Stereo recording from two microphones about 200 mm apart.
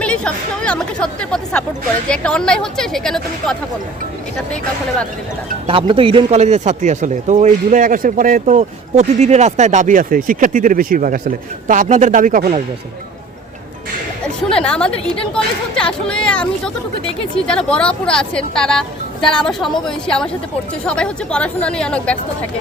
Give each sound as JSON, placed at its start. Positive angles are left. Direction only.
{"t": 0.0, "sound": "speech", "side_deg": 5}
{"t": 5.6, "sound": "speech", "side_deg": -25}
{"t": 14.5, "sound": "speech", "side_deg": 5}